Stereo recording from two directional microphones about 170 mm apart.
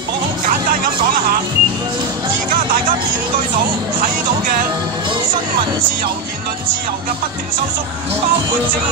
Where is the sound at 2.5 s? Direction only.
55° right (ahead or behind).